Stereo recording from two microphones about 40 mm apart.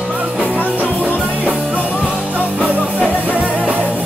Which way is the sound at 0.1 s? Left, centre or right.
Right.